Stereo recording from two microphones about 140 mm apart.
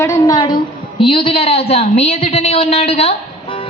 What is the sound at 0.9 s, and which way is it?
A woman's voice, 40° left (ahead or behind).